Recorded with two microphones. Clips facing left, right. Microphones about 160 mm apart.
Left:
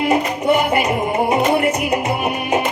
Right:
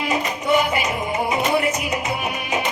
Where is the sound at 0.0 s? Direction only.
55° left (ahead or behind).